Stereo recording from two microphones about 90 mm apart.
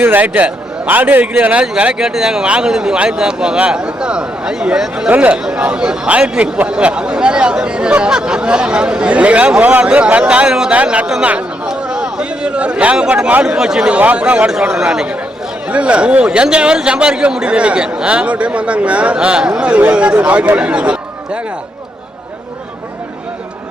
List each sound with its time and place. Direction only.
0.0 s a man's voice: 20° right (ahead or behind)